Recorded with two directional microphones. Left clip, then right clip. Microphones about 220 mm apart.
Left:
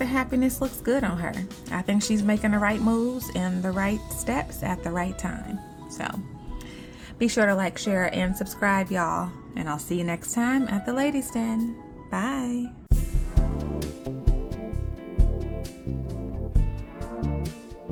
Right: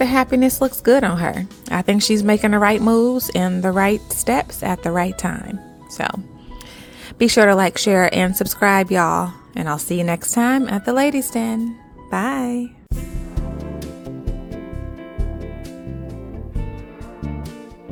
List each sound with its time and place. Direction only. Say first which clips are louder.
0.0 s speech: right 9 dB; 40° right (ahead or behind)
7.2 s speech: right 10 dB; 40° right (ahead or behind)
12.9 s music: right 2 dB; centre (ahead or behind)
17.2 s music: even; centre (ahead or behind)